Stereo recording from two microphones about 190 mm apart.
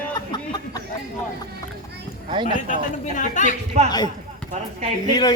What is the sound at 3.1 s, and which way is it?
Speech, 40° left (ahead or behind).